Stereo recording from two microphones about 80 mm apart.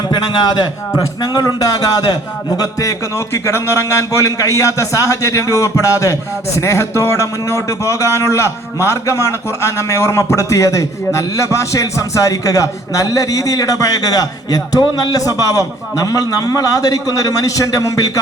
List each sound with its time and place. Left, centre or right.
0.1 s a man's voice: left
2.6 s a man's voice: left